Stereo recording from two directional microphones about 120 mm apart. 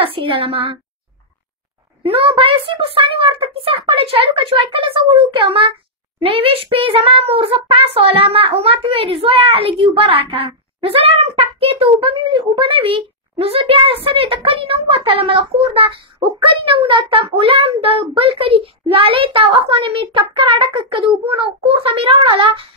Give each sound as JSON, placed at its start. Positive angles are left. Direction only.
{"t": 0.0, "sound": "a woman's voice", "side_deg": -50}
{"t": 2.0, "sound": "a child's voice", "side_deg": -50}